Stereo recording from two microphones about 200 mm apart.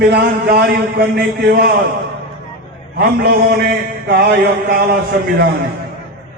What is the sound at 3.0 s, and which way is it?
Mantra, 50° right (ahead or behind).